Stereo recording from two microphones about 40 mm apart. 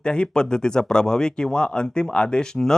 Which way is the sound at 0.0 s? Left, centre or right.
Left.